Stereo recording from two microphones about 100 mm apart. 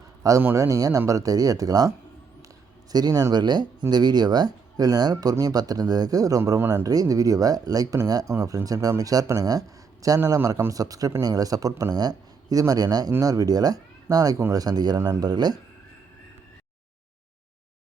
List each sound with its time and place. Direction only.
0.2 s a man's voice: 35° right (ahead or behind)
2.9 s a man's voice: 40° right (ahead or behind)
14.9 s speech: 30° right (ahead or behind)
15.2 s speech: 45° right (ahead or behind)